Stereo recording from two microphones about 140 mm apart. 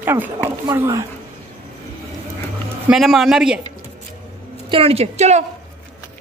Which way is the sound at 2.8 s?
5° right (ahead or behind).